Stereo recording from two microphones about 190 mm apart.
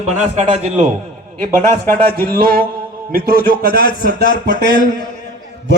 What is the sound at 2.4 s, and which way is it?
Speech, 55° right (ahead or behind).